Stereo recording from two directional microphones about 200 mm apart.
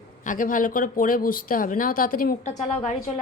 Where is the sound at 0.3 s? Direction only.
40° left (ahead or behind).